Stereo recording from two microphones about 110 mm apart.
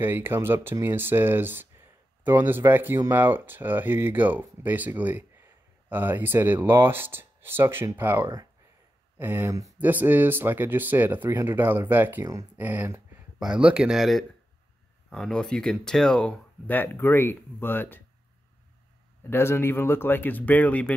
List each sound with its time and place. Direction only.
0.0 s speech: 20° right (ahead or behind)
9.8 s speech: 15° right (ahead or behind); by 18.0 s 20° left (ahead or behind)
19.2 s speech: 20° left (ahead or behind)